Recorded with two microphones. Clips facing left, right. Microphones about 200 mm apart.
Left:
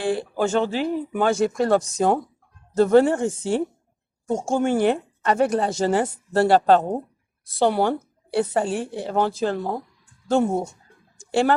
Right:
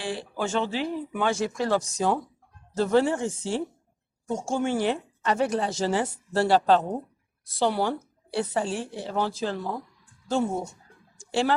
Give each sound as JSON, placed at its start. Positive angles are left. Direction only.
{"t": 0.0, "sound": "a woman's voice", "side_deg": 50}